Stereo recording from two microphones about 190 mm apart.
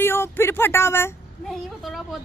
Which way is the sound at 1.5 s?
Centre (ahead or behind).